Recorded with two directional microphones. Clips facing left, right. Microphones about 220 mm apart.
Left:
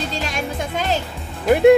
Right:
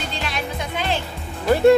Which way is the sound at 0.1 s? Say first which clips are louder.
Left 2 dB; 45° left (ahead or behind).